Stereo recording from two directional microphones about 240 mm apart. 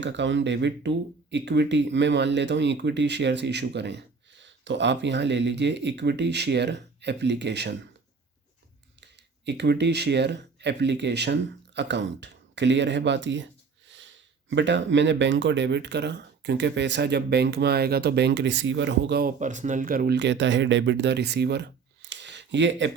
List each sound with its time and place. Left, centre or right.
0.0 s speech: right
9.5 s speech: right
22.1 s a sound: right